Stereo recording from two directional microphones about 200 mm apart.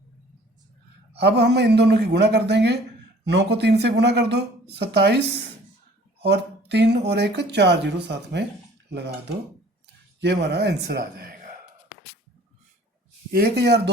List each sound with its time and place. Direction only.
1.1 s speech: 55° right (ahead or behind)
6.7 s speech: 60° right (ahead or behind)
10.2 s speech: 55° right (ahead or behind)
13.3 s speech: 55° right (ahead or behind)